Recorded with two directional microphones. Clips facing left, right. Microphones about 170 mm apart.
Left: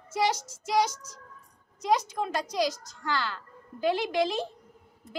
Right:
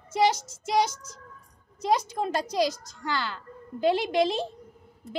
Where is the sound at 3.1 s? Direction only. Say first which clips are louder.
Even; 20° right (ahead or behind).